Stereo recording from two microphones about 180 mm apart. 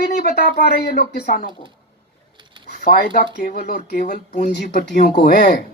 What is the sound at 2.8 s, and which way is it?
Speech, 50° left (ahead or behind).